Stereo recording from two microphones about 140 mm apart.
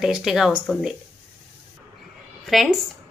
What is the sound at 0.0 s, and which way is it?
Speech, 5° right (ahead or behind).